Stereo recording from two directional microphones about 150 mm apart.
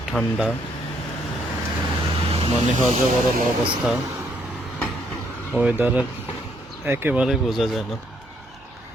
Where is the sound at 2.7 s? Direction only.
50° right (ahead or behind).